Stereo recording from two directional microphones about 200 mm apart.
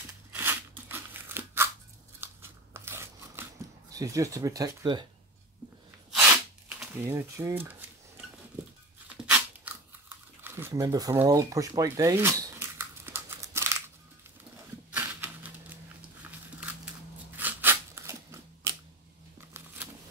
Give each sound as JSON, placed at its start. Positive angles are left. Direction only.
{"t": 0.3, "sound": "crunch", "side_deg": -10}
{"t": 2.1, "sound": "scissors", "side_deg": -10}
{"t": 3.9, "sound": "speech", "side_deg": -15}
{"t": 6.8, "sound": "speech", "side_deg": -10}
{"t": 9.2, "sound": "tearing", "side_deg": -5}
{"t": 14.9, "sound": "a sound", "side_deg": -10}
{"t": 17.4, "sound": "crunch", "side_deg": -10}